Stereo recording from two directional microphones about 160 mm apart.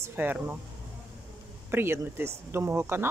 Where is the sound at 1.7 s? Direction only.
15° right (ahead or behind).